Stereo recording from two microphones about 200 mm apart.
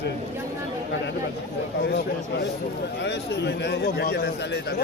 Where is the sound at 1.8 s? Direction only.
60° left (ahead or behind).